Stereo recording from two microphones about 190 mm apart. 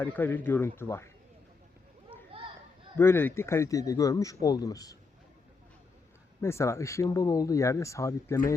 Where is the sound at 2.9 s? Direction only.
10° left (ahead or behind).